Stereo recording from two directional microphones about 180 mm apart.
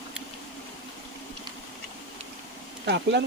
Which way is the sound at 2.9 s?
75° right (ahead or behind).